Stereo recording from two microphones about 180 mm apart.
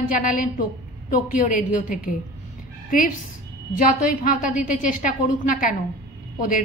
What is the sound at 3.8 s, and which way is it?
A woman's voice, 45° left (ahead or behind).